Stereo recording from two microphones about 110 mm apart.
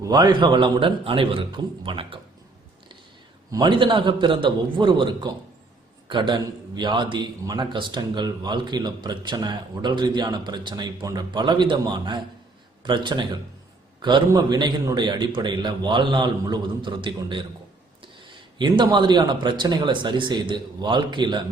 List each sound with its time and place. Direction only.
0.0 s a man's voice: 40° right (ahead or behind); by 2.1 s 55° right (ahead or behind)
3.6 s a man's voice: 50° right (ahead or behind)
18.6 s a man's voice: 45° right (ahead or behind)